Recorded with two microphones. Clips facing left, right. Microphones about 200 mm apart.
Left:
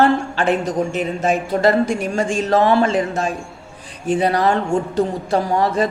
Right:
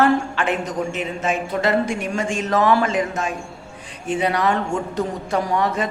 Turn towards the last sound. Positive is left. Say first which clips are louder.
# left 3 dB
turn(degrees=35)  # may be behind; listen again after turning